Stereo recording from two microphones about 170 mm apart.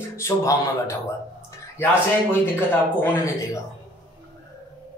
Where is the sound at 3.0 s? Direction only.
15° left (ahead or behind).